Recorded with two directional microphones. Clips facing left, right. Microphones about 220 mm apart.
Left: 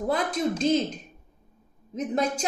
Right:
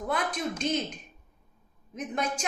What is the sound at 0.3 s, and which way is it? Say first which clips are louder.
Speech: left 7 dB; 35° left (ahead or behind).